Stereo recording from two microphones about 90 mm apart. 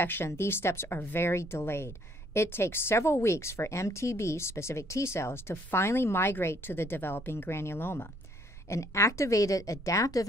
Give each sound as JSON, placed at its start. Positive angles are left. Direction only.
{"t": 0.0, "sound": "a woman's voice", "side_deg": 25}